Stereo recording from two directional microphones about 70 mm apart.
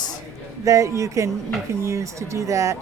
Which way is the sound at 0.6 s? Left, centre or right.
Right.